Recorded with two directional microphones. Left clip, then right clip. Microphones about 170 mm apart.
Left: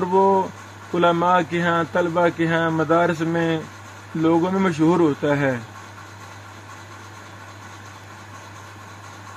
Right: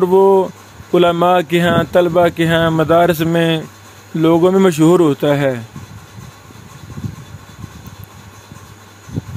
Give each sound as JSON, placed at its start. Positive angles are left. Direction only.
{"t": 0.0, "sound": "speech", "side_deg": -55}